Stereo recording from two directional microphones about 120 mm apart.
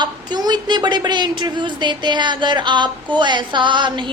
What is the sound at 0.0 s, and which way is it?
A woman's voice, 35° right (ahead or behind).